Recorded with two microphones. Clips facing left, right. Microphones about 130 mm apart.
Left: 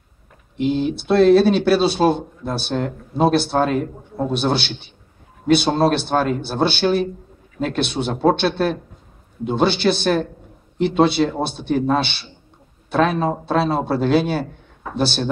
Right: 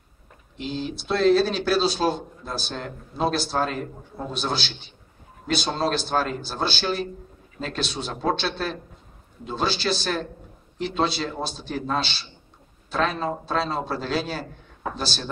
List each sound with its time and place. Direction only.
0.6 s speech: 60° left (ahead or behind)